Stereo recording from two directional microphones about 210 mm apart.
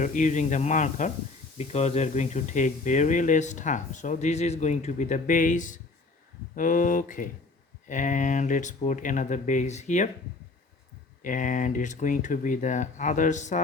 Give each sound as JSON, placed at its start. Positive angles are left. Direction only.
{"t": 0.0, "sound": "speech", "side_deg": 35}
{"t": 11.2, "sound": "speech", "side_deg": 40}